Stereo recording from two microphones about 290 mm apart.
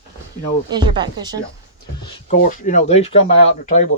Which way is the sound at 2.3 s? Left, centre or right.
Left.